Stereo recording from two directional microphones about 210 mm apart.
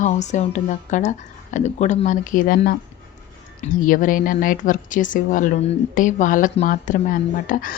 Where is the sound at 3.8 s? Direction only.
40° left (ahead or behind).